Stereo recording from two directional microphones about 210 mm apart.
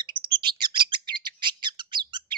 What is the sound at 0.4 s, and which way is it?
Bird, 20° right (ahead or behind).